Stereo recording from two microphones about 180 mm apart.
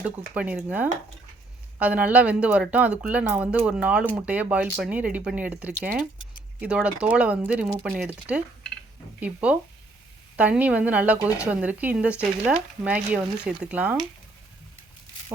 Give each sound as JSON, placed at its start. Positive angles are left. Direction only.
{"t": 0.0, "sound": "speech", "side_deg": -10}